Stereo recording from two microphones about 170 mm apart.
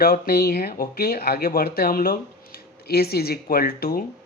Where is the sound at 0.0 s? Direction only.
60° left (ahead or behind).